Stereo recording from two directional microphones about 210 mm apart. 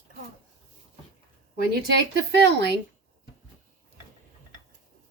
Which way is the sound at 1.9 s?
55° right (ahead or behind).